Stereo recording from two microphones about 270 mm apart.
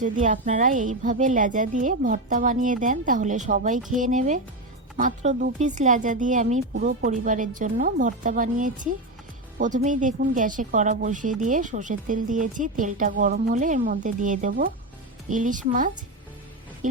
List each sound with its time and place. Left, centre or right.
0.0 s a woman's voice: right